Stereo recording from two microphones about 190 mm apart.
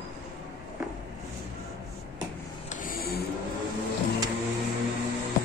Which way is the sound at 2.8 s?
50° left (ahead or behind).